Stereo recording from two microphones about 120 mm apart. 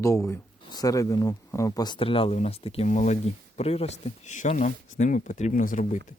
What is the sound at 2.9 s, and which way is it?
Speech, 90° left.